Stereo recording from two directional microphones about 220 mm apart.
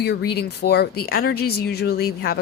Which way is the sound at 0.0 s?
50° left (ahead or behind).